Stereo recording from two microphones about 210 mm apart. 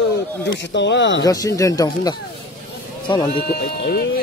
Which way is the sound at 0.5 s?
60° left (ahead or behind).